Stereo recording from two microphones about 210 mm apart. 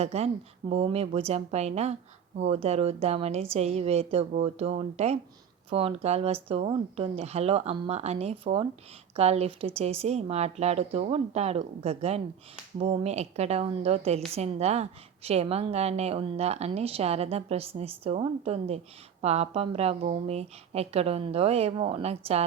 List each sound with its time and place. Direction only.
0.0 s a woman's voice: 30° right (ahead or behind)